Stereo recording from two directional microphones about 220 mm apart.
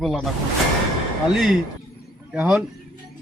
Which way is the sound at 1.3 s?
Centre (ahead or behind).